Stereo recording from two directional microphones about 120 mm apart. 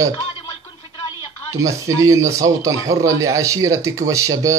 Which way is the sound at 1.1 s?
30° right (ahead or behind).